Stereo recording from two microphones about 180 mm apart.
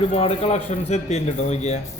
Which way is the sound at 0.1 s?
35° left (ahead or behind).